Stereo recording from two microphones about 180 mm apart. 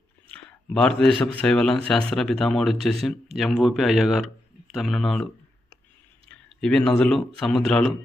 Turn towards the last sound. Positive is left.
turn(degrees=5)  # may be behind; listen again after turning